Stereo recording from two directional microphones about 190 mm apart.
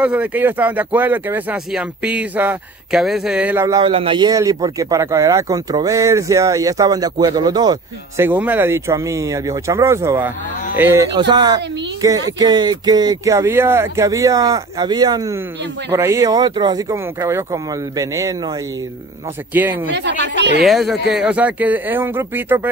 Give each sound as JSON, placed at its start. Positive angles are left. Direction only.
{"t": 0.0, "sound": "speech", "side_deg": -5}
{"t": 11.1, "sound": "speech", "side_deg": -25}
{"t": 19.6, "sound": "speech", "side_deg": -10}
{"t": 19.9, "sound": "speech", "side_deg": -65}
{"t": 20.6, "sound": "speech", "side_deg": 0}